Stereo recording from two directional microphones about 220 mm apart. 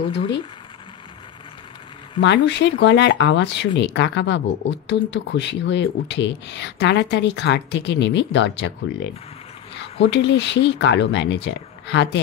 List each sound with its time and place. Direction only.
2.2 s speech: 55° left (ahead or behind)